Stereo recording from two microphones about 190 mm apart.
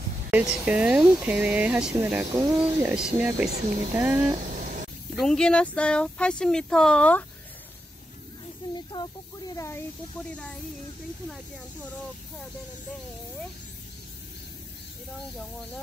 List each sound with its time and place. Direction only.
0.3 s speech: 10° right (ahead or behind)
5.1 s speech: centre (ahead or behind)
8.9 s speech: 20° left (ahead or behind)